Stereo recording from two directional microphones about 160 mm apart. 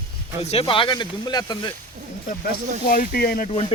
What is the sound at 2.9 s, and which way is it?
Speech, 65° left (ahead or behind).